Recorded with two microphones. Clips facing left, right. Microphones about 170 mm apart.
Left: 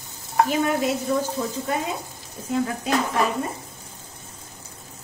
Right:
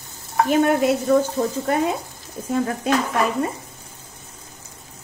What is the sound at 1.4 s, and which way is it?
Speech, 55° right (ahead or behind).